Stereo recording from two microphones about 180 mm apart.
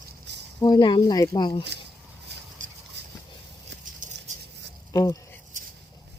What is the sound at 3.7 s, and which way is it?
Patter, 75° right (ahead or behind).